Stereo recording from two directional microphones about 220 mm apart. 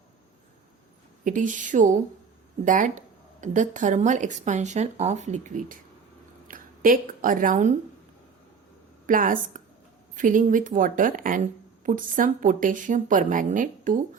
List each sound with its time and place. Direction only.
1.2 s speech: 35° right (ahead or behind)
9.0 s speech: 40° right (ahead or behind)